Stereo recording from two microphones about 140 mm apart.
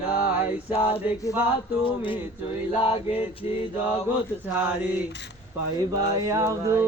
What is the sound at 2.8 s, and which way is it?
Male singing, 45° left (ahead or behind).